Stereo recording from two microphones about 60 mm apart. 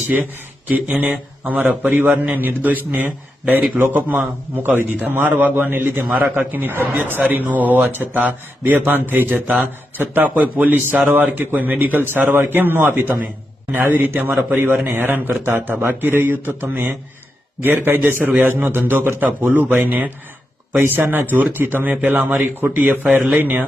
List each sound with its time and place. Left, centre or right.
0.7 s a man's voice: right